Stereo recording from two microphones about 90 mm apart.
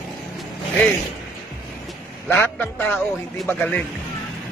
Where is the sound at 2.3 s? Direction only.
20° left (ahead or behind).